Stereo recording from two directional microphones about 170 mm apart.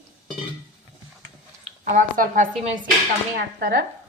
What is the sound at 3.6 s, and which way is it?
Speech, 60° right (ahead or behind).